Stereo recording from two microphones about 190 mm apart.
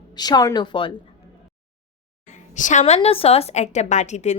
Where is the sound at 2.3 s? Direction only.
40° left (ahead or behind).